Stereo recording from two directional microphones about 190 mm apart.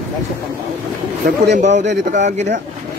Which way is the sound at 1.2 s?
55° right (ahead or behind).